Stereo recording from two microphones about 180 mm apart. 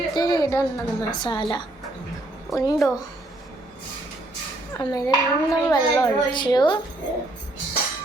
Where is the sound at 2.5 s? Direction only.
Centre (ahead or behind).